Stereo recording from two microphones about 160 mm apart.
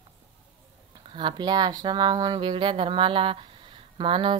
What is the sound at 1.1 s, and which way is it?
A woman's voice, 30° right (ahead or behind).